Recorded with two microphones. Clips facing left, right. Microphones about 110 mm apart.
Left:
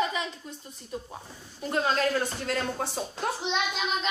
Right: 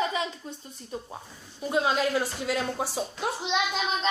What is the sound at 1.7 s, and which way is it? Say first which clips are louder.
A woman's voice: right 1 dB; 10° right (ahead or behind).